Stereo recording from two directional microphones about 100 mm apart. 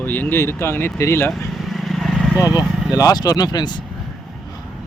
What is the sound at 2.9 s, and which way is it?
Speech, 40° left (ahead or behind).